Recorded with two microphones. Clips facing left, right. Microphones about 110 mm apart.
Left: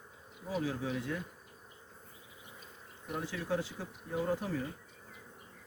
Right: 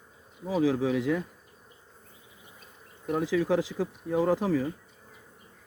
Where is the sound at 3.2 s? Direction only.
90° right.